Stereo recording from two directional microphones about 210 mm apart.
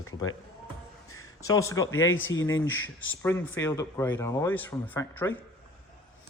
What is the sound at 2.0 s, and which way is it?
Speech, 70° left (ahead or behind).